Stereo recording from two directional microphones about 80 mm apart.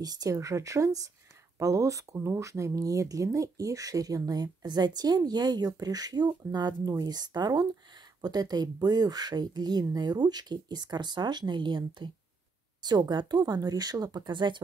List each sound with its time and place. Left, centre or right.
0.0 s speech: right
2.1 s speech: right
12.8 s speech: right